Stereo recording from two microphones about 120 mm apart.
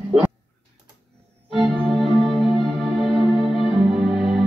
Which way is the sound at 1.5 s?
Centre (ahead or behind).